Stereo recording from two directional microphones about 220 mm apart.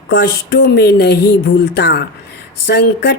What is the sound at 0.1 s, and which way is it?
Speech, 50° left (ahead or behind).